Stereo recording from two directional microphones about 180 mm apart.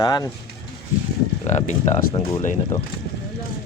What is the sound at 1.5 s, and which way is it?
Speech, 40° left (ahead or behind).